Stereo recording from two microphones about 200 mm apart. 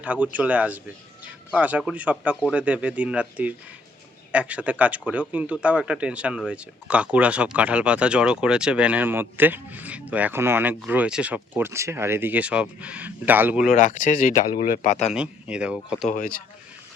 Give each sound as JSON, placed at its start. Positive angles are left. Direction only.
{"t": 0.0, "sound": "speech", "side_deg": -5}
{"t": 13.7, "sound": "speech", "side_deg": 40}
{"t": 15.1, "sound": "speech", "side_deg": -5}
{"t": 16.1, "sound": "speech", "side_deg": 45}